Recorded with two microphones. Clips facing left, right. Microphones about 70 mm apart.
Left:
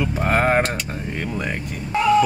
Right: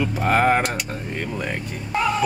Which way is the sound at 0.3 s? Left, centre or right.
Centre.